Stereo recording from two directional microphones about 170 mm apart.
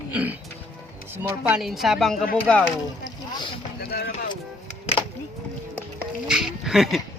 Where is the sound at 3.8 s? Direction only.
70° left (ahead or behind).